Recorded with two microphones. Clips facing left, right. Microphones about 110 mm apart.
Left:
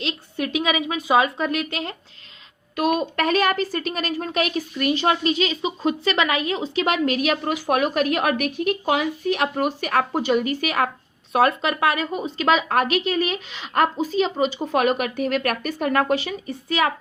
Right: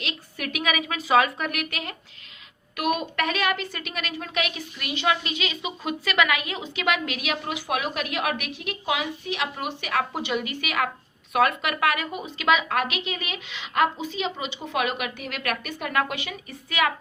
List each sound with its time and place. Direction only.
0.0 s a woman's voice: 30° left (ahead or behind)